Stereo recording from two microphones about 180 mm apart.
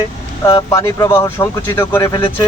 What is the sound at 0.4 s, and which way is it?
Speech, 20° left (ahead or behind).